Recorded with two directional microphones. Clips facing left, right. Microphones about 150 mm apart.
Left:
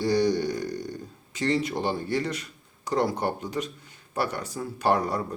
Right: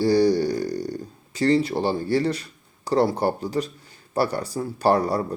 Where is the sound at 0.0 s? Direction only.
35° right (ahead or behind).